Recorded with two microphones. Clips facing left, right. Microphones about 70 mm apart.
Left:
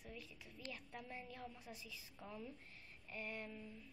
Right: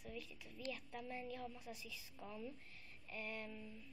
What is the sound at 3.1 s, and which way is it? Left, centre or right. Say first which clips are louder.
Speech: even; left.